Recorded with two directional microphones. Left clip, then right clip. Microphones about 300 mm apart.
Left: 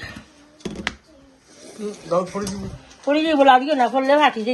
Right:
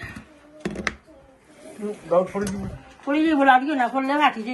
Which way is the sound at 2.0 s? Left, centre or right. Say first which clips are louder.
Right 1 dB; centre.